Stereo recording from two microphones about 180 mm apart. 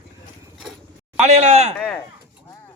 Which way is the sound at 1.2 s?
40° right (ahead or behind).